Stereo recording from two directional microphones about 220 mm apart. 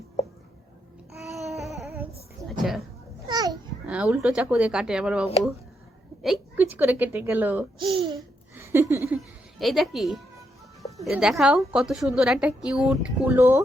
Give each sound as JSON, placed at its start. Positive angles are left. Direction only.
{"t": 1.1, "sound": "a sound", "side_deg": 0}
{"t": 3.2, "sound": "children playing", "side_deg": -15}
{"t": 3.8, "sound": "a woman's voice", "side_deg": -5}
{"t": 7.8, "sound": "babbling", "side_deg": -25}
{"t": 8.5, "sound": "a sound", "side_deg": -10}
{"t": 9.1, "sound": "music", "side_deg": 0}
{"t": 10.9, "sound": "a woman's voice", "side_deg": 0}